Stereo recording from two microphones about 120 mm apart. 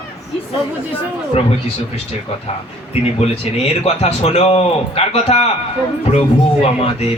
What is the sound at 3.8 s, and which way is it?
A man's voice, 60° left (ahead or behind).